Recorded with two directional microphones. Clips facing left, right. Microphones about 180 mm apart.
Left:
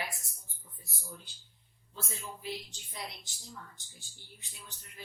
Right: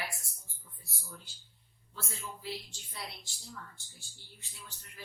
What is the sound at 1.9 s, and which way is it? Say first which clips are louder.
A woman's voice: left 1 dB; 20° left (ahead or behind).